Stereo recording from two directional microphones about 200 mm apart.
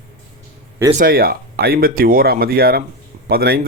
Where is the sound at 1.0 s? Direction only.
45° right (ahead or behind).